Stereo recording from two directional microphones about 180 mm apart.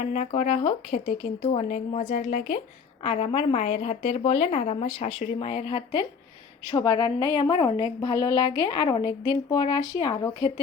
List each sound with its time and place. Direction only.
0.1 s a woman's voice: 40° left (ahead or behind); by 10.5 s 25° left (ahead or behind)